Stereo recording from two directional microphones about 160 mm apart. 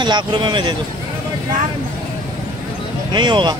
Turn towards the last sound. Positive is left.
turn(degrees=-30)  # may be behind; listen again after turning